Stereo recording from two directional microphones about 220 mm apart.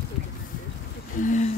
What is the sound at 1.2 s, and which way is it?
Speech, 35° left (ahead or behind).